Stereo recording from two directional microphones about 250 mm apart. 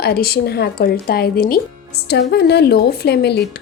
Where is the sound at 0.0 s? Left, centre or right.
Left.